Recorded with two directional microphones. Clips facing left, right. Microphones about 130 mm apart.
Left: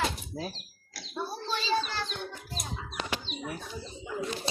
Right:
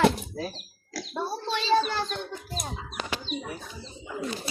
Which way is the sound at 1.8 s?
50° right (ahead or behind).